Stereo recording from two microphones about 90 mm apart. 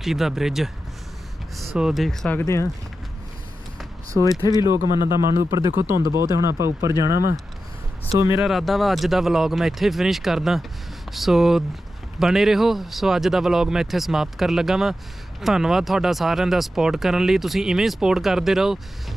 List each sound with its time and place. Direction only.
0.0 s speech: 5° right (ahead or behind)
1.7 s speech: 5° right (ahead or behind)
2.2 s speech: 10° left (ahead or behind)
4.2 s speech: 40° left (ahead or behind)
4.5 s speech: 40° right (ahead or behind)
8.4 s speech: centre (ahead or behind)